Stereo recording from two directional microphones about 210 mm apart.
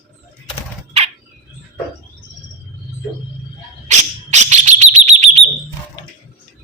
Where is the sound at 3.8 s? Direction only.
35° right (ahead or behind).